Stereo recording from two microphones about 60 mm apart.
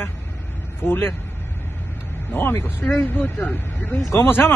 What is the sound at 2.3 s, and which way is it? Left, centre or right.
Speech, left.